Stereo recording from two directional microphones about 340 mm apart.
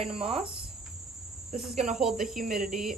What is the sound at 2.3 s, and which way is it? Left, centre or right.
Speech, right.